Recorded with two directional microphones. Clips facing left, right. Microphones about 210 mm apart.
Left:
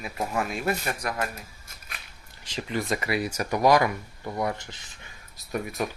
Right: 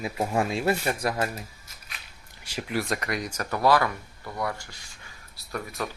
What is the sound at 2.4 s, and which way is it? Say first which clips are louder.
Speech: even; 10° right (ahead or behind).